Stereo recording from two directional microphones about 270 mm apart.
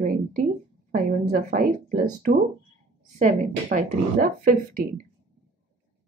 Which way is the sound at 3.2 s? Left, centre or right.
Right.